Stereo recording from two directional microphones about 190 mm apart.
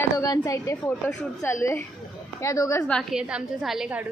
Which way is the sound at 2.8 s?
Centre (ahead or behind).